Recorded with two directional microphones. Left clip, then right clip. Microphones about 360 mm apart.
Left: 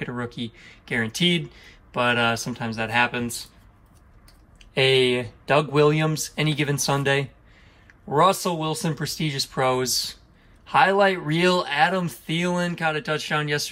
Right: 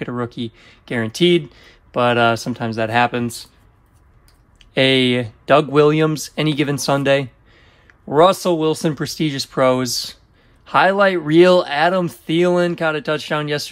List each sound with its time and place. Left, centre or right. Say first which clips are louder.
0.2 s speech: right 6 dB; centre
5.2 s speech: right 7 dB; centre
8.2 s speech: right 7 dB; centre